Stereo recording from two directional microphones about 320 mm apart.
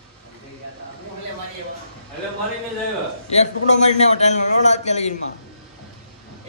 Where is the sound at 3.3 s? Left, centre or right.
Left.